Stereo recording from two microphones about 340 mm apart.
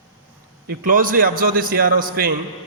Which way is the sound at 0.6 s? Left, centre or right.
Right.